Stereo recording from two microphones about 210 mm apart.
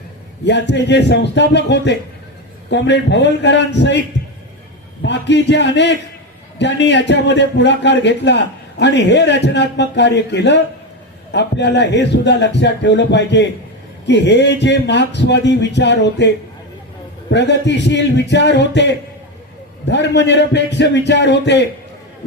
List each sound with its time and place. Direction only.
0.4 s a man's voice: 55° left (ahead or behind)
5.0 s a man's voice: 55° left (ahead or behind)